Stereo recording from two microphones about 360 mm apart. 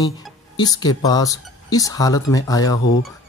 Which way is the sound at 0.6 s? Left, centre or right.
Centre.